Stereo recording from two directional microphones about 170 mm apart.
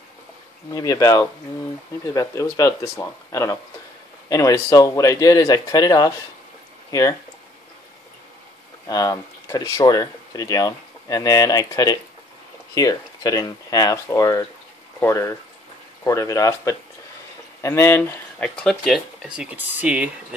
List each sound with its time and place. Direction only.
0.7 s speech: 20° left (ahead or behind)
8.8 s speech: 20° left (ahead or behind); by 20.3 s 5° right (ahead or behind)